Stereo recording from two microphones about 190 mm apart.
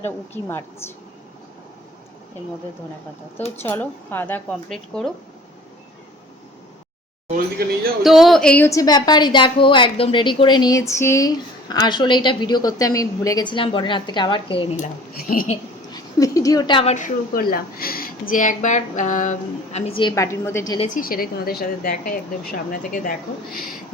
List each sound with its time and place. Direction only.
0.0 s speech: 15° left (ahead or behind)
3.5 s speech: 10° left (ahead or behind)
8.0 s a woman's voice: centre (ahead or behind); by 14.8 s 25° left (ahead or behind)
14.8 s a woman's voice: 50° left (ahead or behind)
15.9 s a woman's voice: 20° left (ahead or behind)
20.7 s a woman's voice: 40° left (ahead or behind)